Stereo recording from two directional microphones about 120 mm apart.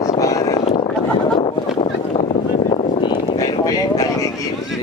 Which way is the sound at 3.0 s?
40° left (ahead or behind).